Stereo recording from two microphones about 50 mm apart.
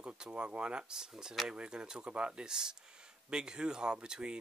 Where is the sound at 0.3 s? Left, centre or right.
Right.